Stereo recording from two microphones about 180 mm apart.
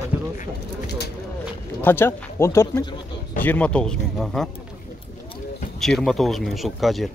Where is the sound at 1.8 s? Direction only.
10° left (ahead or behind).